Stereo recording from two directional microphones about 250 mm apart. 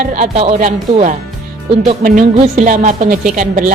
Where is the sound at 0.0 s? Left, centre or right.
Right.